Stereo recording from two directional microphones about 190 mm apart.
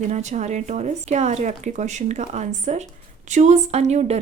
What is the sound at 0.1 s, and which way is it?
A woman's voice, 40° right (ahead or behind).